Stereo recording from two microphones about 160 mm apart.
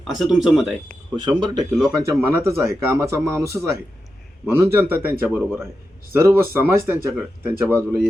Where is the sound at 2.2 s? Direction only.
15° right (ahead or behind).